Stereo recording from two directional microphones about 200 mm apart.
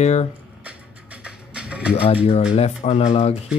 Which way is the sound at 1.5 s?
5° right (ahead or behind).